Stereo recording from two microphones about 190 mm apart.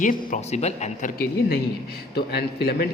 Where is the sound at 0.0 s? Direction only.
45° left (ahead or behind).